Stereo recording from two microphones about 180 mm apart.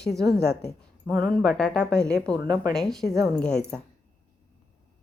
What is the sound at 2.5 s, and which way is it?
Speech, 25° right (ahead or behind).